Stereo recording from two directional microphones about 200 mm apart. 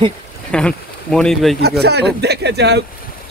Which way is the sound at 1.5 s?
55° right (ahead or behind).